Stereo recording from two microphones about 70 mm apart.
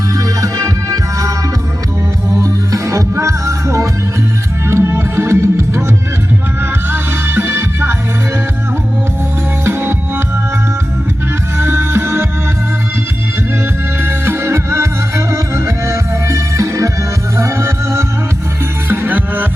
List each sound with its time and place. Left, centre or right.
0.2 s music: right
2.3 s music: right
9.6 s music: right
11.5 s music: right
14.0 s music: right
18.9 s music: right